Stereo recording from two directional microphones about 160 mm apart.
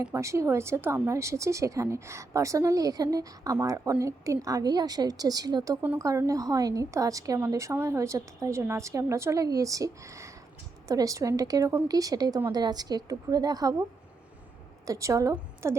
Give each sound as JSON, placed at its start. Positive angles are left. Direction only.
{"t": 0.1, "sound": "speech", "side_deg": -20}
{"t": 14.8, "sound": "speech", "side_deg": -20}